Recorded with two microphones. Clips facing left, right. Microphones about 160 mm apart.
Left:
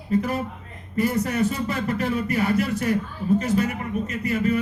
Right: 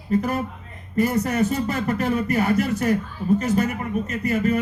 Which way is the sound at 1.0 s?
45° right (ahead or behind).